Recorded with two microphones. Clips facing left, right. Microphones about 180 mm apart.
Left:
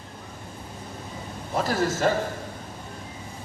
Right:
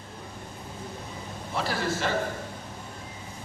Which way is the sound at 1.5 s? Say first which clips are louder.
Left 5 dB; 45° left (ahead or behind).